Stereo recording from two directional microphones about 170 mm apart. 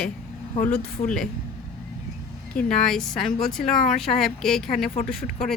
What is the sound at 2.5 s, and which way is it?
Speech, 5° left (ahead or behind).